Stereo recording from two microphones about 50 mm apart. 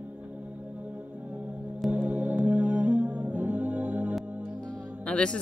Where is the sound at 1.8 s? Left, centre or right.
Right.